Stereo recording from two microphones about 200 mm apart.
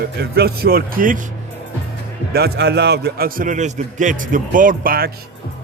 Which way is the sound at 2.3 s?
55° right (ahead or behind).